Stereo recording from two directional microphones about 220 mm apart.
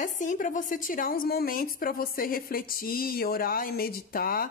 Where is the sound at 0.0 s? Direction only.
35° left (ahead or behind).